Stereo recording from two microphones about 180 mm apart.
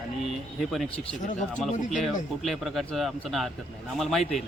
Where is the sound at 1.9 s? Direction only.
Centre (ahead or behind).